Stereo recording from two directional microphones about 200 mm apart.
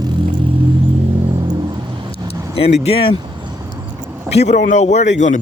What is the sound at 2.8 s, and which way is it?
Speech, 25° left (ahead or behind).